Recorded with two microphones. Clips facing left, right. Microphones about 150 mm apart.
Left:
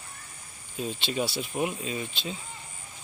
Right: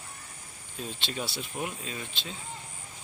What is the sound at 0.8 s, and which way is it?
Speech, 5° left (ahead or behind).